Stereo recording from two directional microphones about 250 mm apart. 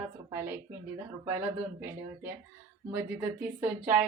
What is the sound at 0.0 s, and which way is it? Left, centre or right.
Speech, centre.